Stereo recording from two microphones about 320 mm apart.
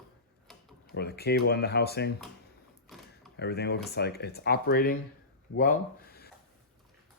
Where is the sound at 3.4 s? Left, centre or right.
Left.